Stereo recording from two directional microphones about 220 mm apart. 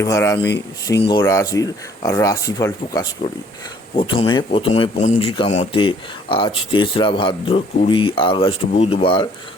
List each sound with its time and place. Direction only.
0.0 s speech: 15° left (ahead or behind)